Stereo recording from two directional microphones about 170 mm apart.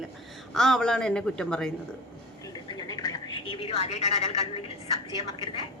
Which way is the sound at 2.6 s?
25° left (ahead or behind).